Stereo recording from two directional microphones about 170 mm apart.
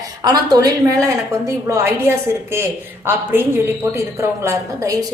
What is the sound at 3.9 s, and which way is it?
A woman's voice, 15° right (ahead or behind).